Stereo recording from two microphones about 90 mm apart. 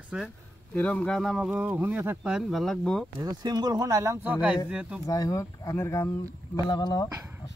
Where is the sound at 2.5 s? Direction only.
5° left (ahead or behind).